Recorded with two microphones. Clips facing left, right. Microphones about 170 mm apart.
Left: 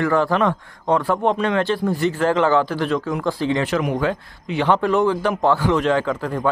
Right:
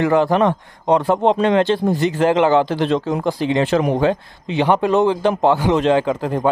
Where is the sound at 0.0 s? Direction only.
20° right (ahead or behind).